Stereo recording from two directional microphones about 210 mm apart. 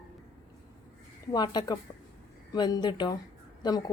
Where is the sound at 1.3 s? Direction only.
20° left (ahead or behind).